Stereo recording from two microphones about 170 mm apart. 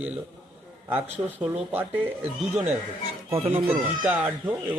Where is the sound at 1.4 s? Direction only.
10° right (ahead or behind).